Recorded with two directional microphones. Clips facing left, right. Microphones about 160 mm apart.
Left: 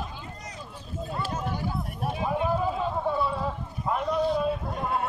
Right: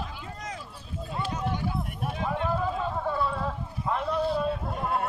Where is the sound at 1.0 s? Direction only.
40° left (ahead or behind).